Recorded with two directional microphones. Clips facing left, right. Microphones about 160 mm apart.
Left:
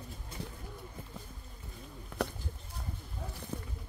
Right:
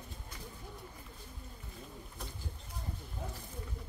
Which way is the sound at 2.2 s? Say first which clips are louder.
Left 15 dB; 70° left (ahead or behind).